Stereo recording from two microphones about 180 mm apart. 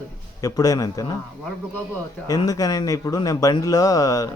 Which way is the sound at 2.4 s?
20° left (ahead or behind).